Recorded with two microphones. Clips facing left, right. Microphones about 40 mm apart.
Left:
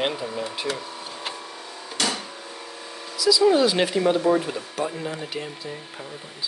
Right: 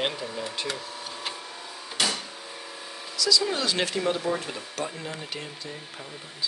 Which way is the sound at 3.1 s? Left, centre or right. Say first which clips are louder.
Left 7 dB; centre.